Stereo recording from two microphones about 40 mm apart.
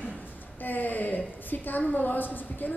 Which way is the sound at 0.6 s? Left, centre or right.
Left.